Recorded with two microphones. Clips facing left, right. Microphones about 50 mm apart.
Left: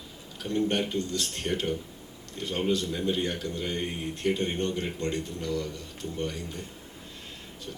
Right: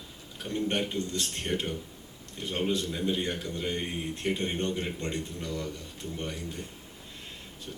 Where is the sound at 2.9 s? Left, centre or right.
Centre.